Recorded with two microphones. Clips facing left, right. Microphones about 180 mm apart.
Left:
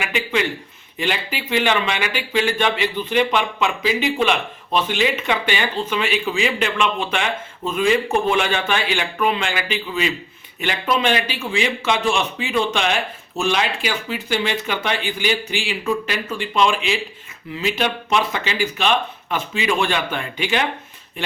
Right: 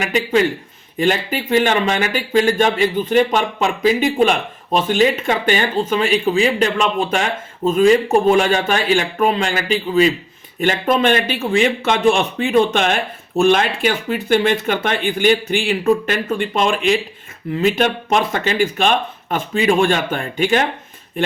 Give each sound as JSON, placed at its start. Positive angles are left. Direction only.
{"t": 0.0, "sound": "speech", "side_deg": -40}